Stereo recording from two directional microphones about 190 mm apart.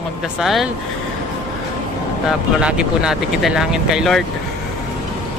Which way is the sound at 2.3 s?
5° right (ahead or behind).